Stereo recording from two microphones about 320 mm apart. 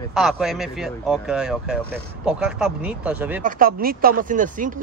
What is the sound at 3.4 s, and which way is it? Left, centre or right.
Speech, right.